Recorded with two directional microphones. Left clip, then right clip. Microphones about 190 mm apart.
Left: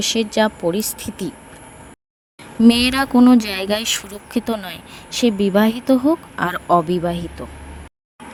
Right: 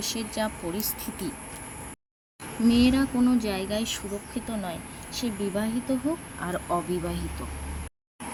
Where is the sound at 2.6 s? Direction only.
60° left (ahead or behind); by 7.2 s 40° left (ahead or behind).